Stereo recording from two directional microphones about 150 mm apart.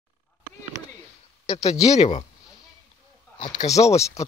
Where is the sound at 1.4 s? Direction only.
40° left (ahead or behind).